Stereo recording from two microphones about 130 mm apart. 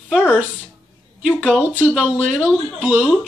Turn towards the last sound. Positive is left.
turn(degrees=-10)  # may be behind; listen again after turning